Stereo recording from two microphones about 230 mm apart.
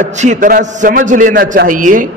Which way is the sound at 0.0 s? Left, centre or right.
Right.